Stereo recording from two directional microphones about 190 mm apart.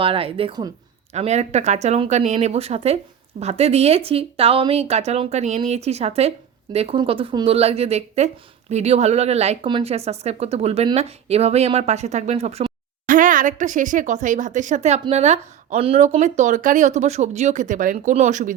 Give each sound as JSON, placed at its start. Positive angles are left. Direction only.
{"t": 0.0, "sound": "speech", "side_deg": -30}
{"t": 1.1, "sound": "speech", "side_deg": -35}